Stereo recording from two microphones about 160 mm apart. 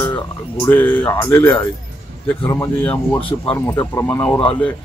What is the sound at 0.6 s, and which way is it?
Speech, 10° left (ahead or behind).